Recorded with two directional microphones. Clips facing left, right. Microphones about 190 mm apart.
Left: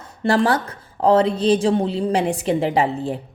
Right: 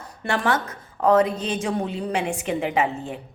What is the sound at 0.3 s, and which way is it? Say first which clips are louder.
A woman's voice: left 5 dB; 35° left (ahead or behind).